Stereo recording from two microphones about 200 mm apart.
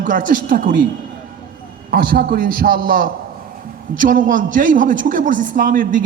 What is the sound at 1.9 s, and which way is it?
A man's voice, 45° right (ahead or behind).